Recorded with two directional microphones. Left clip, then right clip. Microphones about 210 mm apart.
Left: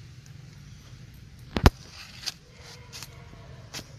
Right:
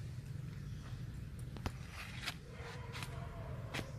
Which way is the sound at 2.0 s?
50° left (ahead or behind).